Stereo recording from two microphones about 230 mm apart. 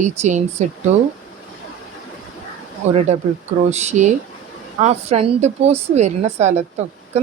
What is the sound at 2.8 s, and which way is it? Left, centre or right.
A woman's voice, right.